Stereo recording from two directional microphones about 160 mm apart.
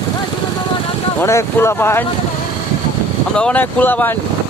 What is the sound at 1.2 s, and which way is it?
Speech, 15° left (ahead or behind).